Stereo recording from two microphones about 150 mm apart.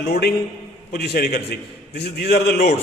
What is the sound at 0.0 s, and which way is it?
A man's voice, 90° left.